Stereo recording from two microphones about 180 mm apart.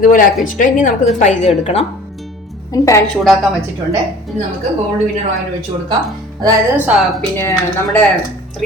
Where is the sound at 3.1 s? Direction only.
Centre (ahead or behind).